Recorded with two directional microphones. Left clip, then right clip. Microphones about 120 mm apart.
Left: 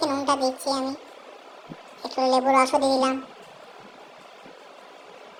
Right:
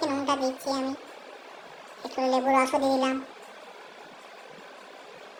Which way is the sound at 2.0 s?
45° left (ahead or behind).